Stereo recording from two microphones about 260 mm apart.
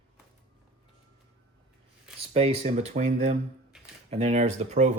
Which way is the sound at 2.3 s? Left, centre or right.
Right.